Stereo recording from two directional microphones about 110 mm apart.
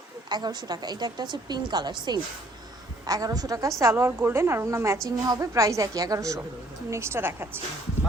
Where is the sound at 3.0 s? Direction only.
35° right (ahead or behind).